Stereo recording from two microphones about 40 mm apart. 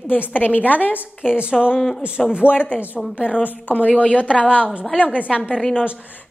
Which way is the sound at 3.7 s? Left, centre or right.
Left.